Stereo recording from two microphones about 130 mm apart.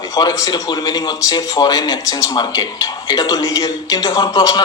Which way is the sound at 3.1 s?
25° left (ahead or behind).